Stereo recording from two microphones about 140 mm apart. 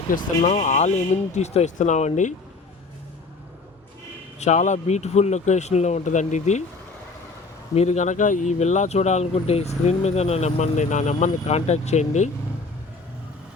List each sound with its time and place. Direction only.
0.1 s speech: 75° left (ahead or behind)
0.4 s speech: 60° left (ahead or behind)
4.4 s speech: 60° left (ahead or behind)
7.8 s speech: 55° left (ahead or behind)